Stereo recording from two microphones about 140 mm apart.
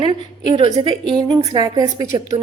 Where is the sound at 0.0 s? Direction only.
40° right (ahead or behind).